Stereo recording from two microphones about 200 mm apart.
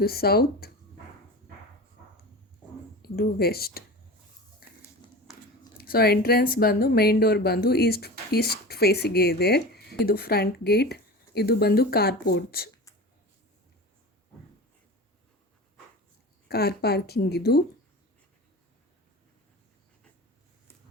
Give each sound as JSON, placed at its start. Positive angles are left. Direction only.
{"t": 0.0, "sound": "speech", "side_deg": 50}
{"t": 3.0, "sound": "speech", "side_deg": 50}
{"t": 5.7, "sound": "speech", "side_deg": 50}
{"t": 16.5, "sound": "speech", "side_deg": 50}